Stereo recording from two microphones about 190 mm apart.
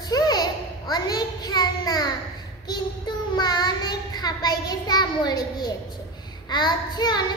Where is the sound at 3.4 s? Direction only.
20° left (ahead or behind).